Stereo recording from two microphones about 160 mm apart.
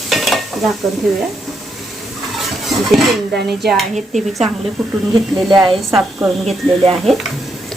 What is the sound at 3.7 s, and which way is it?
Speech, centre (ahead or behind).